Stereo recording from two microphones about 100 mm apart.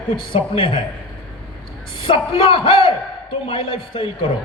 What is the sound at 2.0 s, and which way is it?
Speech, 65° left (ahead or behind).